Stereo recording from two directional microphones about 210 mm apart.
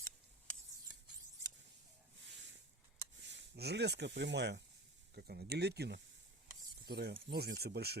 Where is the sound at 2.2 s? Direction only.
60° right (ahead or behind).